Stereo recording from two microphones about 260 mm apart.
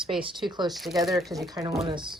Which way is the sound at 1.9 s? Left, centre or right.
Centre.